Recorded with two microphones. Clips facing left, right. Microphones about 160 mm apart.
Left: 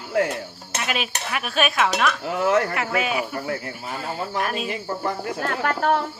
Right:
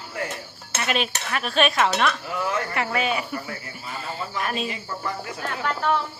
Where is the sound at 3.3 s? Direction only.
60° left (ahead or behind).